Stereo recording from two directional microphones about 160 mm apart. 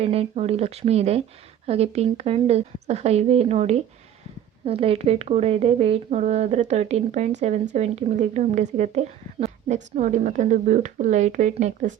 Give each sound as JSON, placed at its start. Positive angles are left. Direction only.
{"t": 0.0, "sound": "a woman's voice", "side_deg": -40}